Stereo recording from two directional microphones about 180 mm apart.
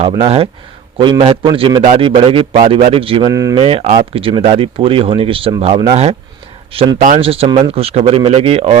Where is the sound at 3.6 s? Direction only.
35° right (ahead or behind).